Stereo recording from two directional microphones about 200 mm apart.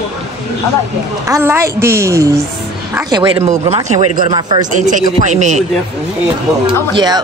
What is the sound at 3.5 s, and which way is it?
Speech, 35° right (ahead or behind).